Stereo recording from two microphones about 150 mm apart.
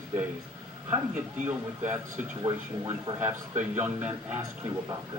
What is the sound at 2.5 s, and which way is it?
Speech, 25° right (ahead or behind).